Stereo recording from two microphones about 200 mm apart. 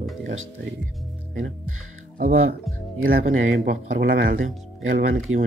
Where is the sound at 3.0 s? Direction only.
40° right (ahead or behind).